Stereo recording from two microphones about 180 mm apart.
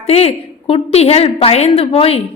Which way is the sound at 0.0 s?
35° left (ahead or behind).